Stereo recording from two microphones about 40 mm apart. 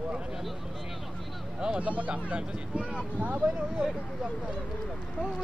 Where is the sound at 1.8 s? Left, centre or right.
Right.